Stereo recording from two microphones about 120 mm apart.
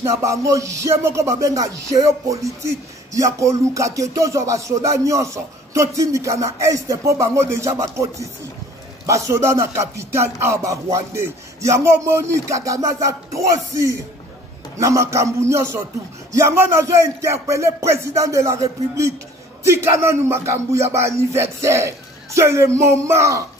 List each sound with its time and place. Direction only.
0.0 s music: 25° right (ahead or behind)